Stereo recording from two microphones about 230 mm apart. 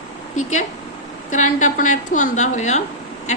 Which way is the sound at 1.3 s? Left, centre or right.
Left.